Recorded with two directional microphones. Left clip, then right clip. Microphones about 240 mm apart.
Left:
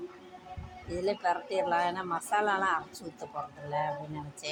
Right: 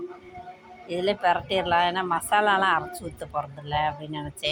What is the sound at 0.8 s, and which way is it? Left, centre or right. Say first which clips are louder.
Speech: right 7 dB; right.